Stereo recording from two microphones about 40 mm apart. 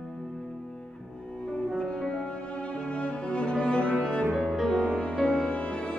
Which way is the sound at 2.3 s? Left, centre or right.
Left.